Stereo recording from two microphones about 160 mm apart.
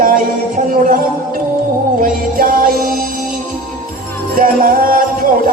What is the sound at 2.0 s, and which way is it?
Music, 60° right (ahead or behind).